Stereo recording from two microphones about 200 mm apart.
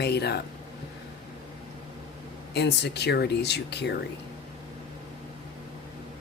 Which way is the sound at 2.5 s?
55° left (ahead or behind).